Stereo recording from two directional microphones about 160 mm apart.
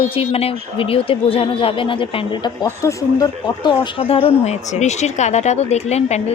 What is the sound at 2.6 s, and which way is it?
Speech, 20° left (ahead or behind).